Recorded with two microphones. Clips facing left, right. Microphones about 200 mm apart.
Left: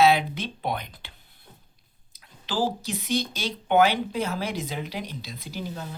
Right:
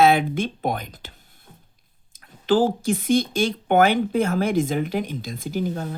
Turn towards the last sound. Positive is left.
turn(degrees=-50)  # may be behind; listen again after turning